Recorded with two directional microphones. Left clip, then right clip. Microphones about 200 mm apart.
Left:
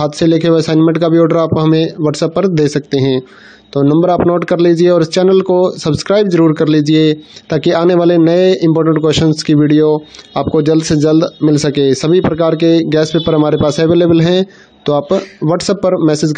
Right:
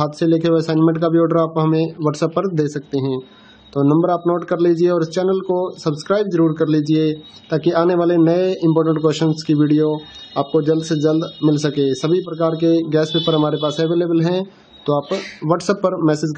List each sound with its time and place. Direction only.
0.0 s speech: 35° left (ahead or behind)